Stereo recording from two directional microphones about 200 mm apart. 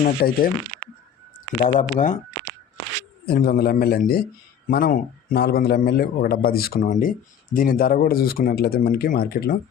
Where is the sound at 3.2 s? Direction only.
50° left (ahead or behind).